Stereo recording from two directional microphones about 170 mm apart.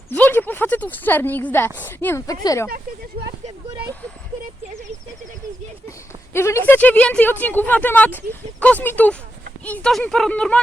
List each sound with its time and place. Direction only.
0.1 s a woman's voice: 10° left (ahead or behind)
2.6 s speech: 60° right (ahead or behind)
6.3 s speech: 15° left (ahead or behind)